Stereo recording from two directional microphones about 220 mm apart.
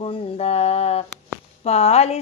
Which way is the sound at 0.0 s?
25° left (ahead or behind).